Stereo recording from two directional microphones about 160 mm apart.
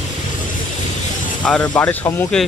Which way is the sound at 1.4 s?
5° left (ahead or behind).